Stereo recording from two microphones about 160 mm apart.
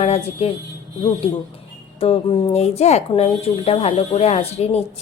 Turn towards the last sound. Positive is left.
turn(degrees=40)  # may be behind; listen again after turning